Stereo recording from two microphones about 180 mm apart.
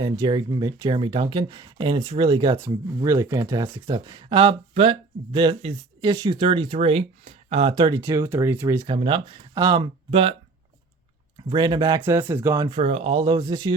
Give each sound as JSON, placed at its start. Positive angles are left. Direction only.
{"t": 0.0, "sound": "speech", "side_deg": -20}
{"t": 11.4, "sound": "speech", "side_deg": -25}
{"t": 12.7, "sound": "speech", "side_deg": -35}